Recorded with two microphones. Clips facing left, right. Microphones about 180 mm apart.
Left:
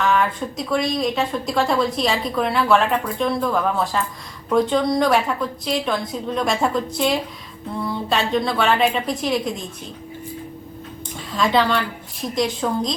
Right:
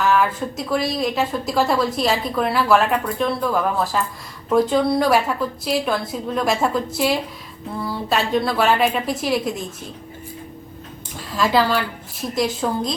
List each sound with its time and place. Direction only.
0.0 s speech: 5° right (ahead or behind)
11.3 s speech: 5° right (ahead or behind)